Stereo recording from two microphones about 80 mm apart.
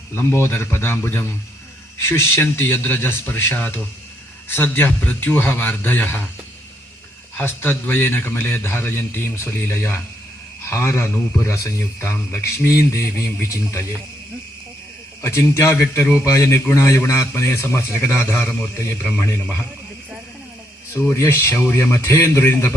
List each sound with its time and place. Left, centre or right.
0.1 s a man's voice: left
7.3 s a man's voice: left
15.2 s a man's voice: left; by 19.6 s centre
21.2 s speech: left